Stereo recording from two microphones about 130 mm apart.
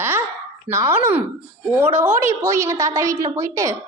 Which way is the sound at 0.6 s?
20° right (ahead or behind).